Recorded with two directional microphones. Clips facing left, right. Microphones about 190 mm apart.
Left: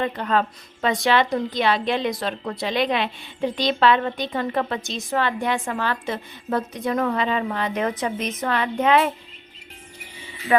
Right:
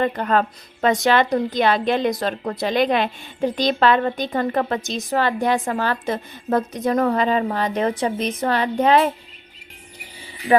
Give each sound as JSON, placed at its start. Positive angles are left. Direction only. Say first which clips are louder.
{"t": 0.0, "sound": "a woman's voice", "louder": "right 3 dB", "side_deg": -45}
{"t": 10.5, "sound": "speech", "louder": "right 3 dB", "side_deg": -35}